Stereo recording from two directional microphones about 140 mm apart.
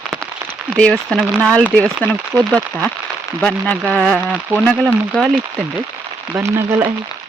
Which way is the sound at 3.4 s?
5° left (ahead or behind).